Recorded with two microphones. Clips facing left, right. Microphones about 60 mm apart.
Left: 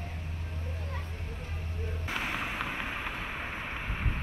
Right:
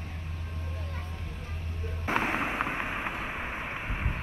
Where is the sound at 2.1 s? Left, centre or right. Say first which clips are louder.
Right 6 dB; right; by 4.2 s centre.